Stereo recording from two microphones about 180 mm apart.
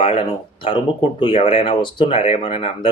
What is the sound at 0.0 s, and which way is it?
Speech, 30° left (ahead or behind).